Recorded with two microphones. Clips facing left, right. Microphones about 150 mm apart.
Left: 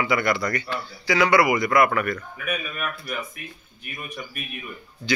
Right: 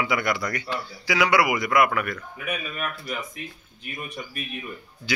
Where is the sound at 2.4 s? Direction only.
25° right (ahead or behind).